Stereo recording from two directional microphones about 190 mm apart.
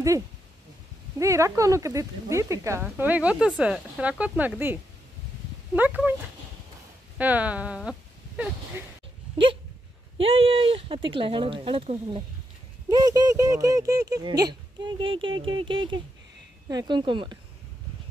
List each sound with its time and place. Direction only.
1.2 s speech: 15° right (ahead or behind)
5.8 s speech: 10° right (ahead or behind)
7.2 s speech: 10° right (ahead or behind)
9.4 s speech: 25° right (ahead or behind)